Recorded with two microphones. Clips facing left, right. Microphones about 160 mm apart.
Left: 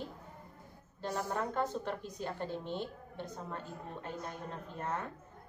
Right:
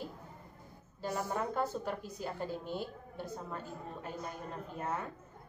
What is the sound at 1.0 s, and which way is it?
A woman's voice, 5° right (ahead or behind).